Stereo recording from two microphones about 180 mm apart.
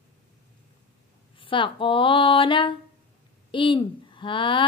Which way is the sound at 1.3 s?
30° left (ahead or behind).